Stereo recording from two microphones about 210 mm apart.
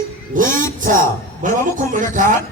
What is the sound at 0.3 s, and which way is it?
A woman's voice, 40° right (ahead or behind).